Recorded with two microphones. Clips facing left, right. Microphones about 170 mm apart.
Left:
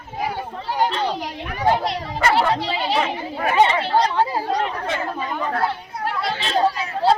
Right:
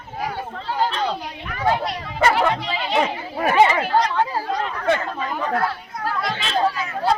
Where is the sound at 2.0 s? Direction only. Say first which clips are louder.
Right 1 dB; 35° left (ahead or behind).